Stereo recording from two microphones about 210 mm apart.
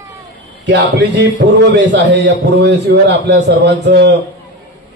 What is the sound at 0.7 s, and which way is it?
A man's voice, 55° right (ahead or behind).